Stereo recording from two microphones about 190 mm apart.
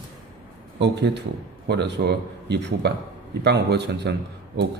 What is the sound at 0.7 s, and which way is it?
Speech, 65° right (ahead or behind).